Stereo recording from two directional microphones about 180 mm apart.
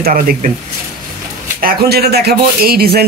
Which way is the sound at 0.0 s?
50° right (ahead or behind).